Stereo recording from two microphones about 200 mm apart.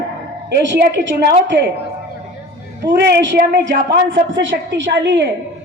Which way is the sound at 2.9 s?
55° right (ahead or behind).